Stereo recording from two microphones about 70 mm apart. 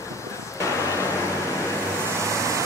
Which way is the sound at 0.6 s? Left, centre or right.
Left.